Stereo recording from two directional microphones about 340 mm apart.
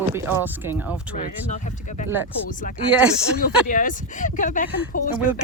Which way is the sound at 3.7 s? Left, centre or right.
Left.